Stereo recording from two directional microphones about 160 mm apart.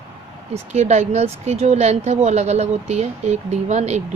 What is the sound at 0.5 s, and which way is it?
Speech, 45° right (ahead or behind).